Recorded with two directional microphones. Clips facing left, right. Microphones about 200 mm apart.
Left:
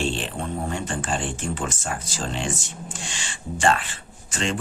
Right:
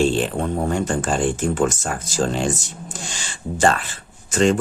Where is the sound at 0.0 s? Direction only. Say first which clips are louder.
Right 8 dB; 40° right (ahead or behind).